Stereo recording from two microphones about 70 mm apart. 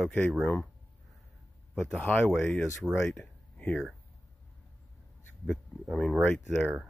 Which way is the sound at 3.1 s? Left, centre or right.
Centre.